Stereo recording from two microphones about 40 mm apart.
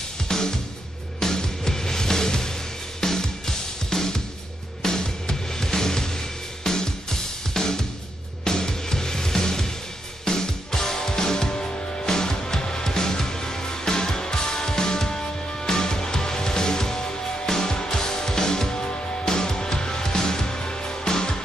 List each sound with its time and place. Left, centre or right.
0.3 s music: centre